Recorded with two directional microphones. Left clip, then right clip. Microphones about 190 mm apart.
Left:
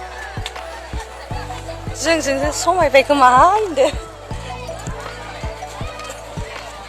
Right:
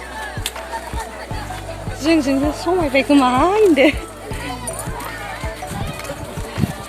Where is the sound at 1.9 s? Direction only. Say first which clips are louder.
Even; 45° left (ahead or behind).